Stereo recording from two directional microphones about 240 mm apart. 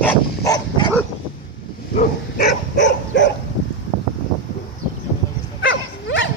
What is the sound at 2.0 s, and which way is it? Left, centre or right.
Dog, left.